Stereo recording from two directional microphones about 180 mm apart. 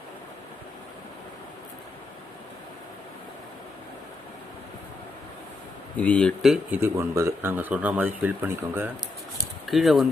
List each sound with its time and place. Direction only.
6.0 s speech: 5° left (ahead or behind)
6.8 s speech: 15° right (ahead or behind)
9.6 s speech: centre (ahead or behind)